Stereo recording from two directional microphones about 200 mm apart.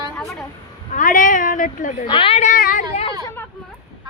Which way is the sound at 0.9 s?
40° left (ahead or behind).